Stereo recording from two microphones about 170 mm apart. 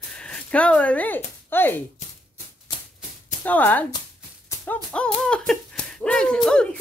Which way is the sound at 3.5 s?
10° left (ahead or behind).